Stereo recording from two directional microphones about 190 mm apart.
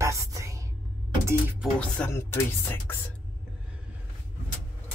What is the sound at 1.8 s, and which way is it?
Speech, 10° left (ahead or behind).